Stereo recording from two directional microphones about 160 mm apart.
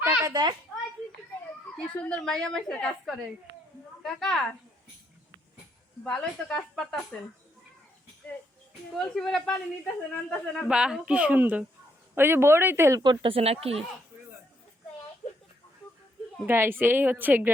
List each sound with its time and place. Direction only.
0.0 s a sound: 10° right (ahead or behind)
1.7 s a man's voice: 5° left (ahead or behind)
4.0 s a man's voice: centre (ahead or behind)
6.0 s a man's voice: 5° left (ahead or behind)
9.0 s a man's voice: 5° left (ahead or behind); by 13.0 s 15° right (ahead or behind)
13.0 s speech: 30° right (ahead or behind)
16.5 s a woman's voice: 15° right (ahead or behind)